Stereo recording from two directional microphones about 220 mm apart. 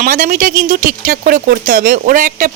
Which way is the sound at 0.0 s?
40° right (ahead or behind).